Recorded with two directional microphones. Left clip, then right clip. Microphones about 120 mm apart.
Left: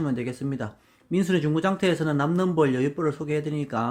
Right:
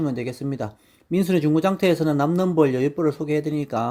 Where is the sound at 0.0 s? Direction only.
35° right (ahead or behind).